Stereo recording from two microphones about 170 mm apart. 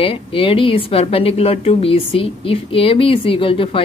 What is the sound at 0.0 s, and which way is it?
A woman's voice, 30° left (ahead or behind).